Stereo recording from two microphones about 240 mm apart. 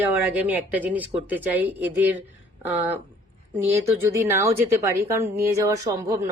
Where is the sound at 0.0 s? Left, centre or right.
Centre.